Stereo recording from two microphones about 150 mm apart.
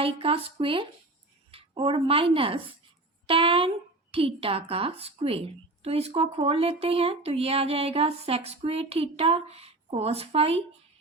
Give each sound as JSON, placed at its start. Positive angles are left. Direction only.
{"t": 0.0, "sound": "a woman's voice", "side_deg": -40}